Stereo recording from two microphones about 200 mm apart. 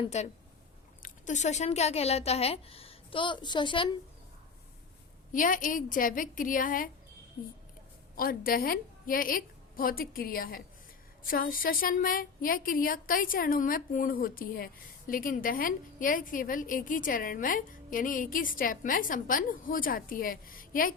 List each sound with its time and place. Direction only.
0.0 s speech: 35° left (ahead or behind)
5.3 s a woman's voice: 40° left (ahead or behind)
8.1 s a woman's voice: 45° left (ahead or behind)